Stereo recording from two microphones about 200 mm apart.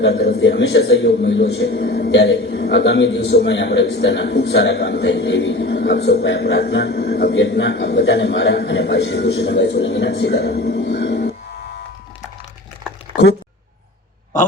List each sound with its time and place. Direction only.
0.0 s a man's voice: 50° left (ahead or behind)